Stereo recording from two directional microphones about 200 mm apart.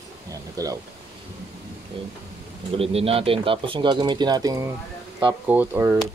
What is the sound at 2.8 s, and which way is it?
Speech, 30° right (ahead or behind).